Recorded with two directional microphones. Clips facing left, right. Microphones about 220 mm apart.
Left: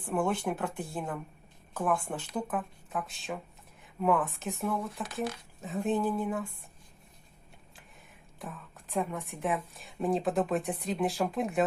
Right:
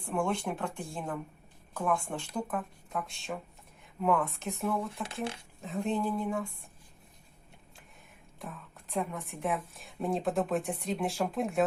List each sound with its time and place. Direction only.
0.0 s a woman's voice: 5° left (ahead or behind)
5.0 s speech: 30° right (ahead or behind)
5.5 s a woman's voice: 5° left (ahead or behind)
8.4 s a woman's voice: centre (ahead or behind)